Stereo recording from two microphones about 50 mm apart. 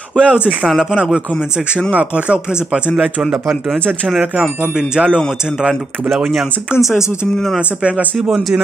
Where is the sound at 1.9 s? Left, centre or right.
Right.